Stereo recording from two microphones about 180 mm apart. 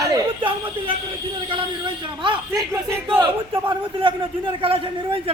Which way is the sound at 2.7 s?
15° right (ahead or behind).